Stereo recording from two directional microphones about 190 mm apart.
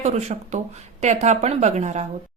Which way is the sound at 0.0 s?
35° right (ahead or behind).